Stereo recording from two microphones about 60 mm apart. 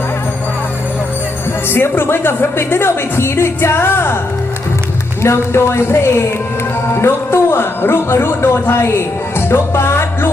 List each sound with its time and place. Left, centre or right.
1.6 s a woman's voice: left
5.2 s a woman's voice: left